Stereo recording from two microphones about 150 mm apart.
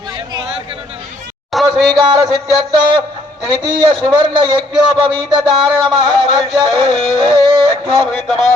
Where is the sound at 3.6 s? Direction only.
30° right (ahead or behind).